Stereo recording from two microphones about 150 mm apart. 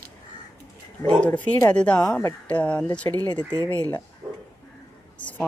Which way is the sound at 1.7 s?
10° left (ahead or behind).